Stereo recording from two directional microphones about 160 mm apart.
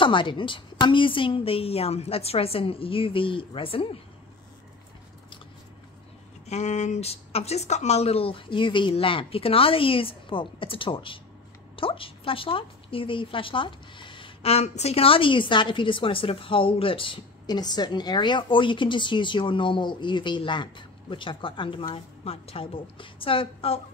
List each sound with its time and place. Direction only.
0.0 s a woman's voice: 30° left (ahead or behind)
6.4 s a woman's voice: 45° left (ahead or behind)